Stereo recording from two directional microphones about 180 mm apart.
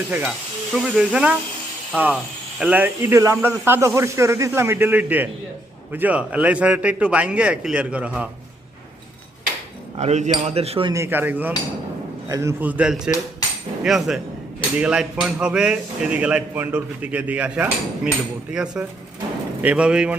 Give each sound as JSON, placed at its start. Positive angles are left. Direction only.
{"t": 0.1, "sound": "speech", "side_deg": -5}
{"t": 10.0, "sound": "speech", "side_deg": -40}
{"t": 10.9, "sound": "speech", "side_deg": -15}